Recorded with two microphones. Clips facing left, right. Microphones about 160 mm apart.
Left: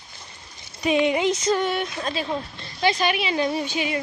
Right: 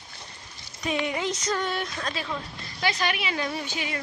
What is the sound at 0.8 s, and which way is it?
Speech, 20° left (ahead or behind).